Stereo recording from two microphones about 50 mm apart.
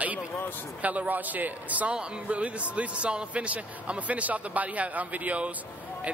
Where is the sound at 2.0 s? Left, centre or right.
Right.